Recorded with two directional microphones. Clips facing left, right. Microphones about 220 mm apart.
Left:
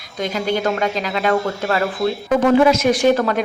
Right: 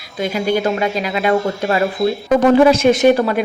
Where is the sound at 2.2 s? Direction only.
35° right (ahead or behind); by 3.4 s 15° right (ahead or behind).